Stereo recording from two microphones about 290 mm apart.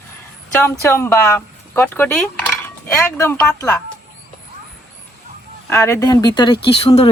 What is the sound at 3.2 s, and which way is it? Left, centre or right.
Speech, centre.